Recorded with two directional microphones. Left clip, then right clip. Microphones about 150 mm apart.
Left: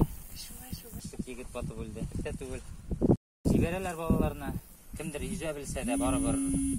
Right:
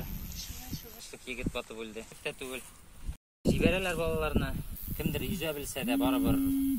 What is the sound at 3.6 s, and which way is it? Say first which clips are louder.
Speech: right 4 dB; 65° left (ahead or behind).